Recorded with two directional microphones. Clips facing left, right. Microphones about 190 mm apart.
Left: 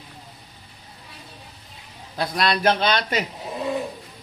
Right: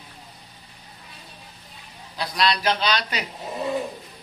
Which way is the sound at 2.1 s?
50° left (ahead or behind).